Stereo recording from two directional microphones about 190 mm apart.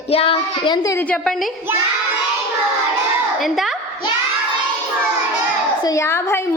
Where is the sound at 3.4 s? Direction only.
Centre (ahead or behind).